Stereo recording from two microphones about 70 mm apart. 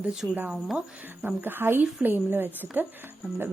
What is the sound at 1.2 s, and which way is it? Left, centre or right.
A woman's voice, right.